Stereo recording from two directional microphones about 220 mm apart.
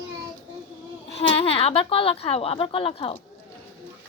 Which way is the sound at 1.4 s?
25° left (ahead or behind).